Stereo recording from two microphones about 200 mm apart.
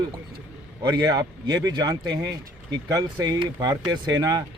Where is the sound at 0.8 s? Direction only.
20° right (ahead or behind).